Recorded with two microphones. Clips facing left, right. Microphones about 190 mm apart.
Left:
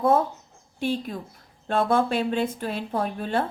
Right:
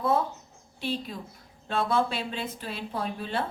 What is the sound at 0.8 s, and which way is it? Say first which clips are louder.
Speech: left 5 dB; 50° left (ahead or behind).